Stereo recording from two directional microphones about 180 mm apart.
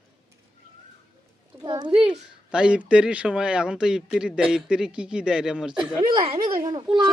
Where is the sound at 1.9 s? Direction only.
5° right (ahead or behind).